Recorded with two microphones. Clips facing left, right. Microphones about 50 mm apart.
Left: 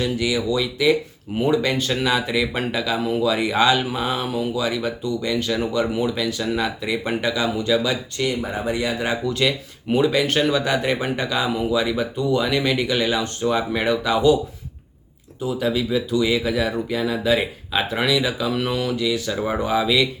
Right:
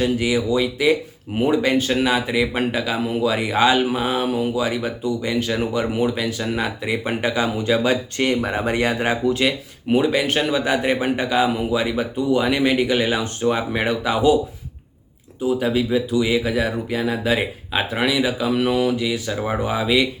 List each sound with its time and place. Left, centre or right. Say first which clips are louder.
0.0 s speech: right 2 dB; right
8.2 s speech: right 2 dB; right
9.2 s speech: right 2 dB; centre
15.6 s speech: left 2 dB; right